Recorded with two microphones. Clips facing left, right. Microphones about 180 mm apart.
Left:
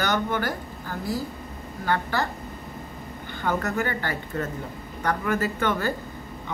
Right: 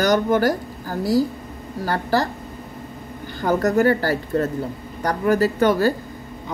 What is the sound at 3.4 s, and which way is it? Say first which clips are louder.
Speech: right 8 dB; 40° right (ahead or behind).